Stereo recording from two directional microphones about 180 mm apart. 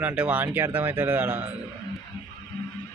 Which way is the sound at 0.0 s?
10° right (ahead or behind).